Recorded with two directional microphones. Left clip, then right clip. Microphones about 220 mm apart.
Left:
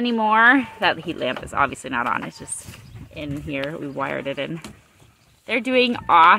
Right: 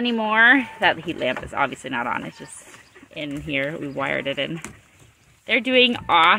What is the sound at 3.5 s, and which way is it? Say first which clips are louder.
A woman's voice: right 2 dB; 5° left (ahead or behind).